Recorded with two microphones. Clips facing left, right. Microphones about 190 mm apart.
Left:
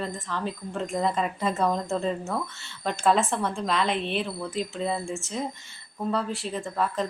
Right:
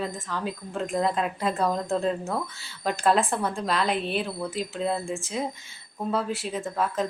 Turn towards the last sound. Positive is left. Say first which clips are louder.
# right 1 dB
turn(degrees=0)  # may be behind; listen again after turning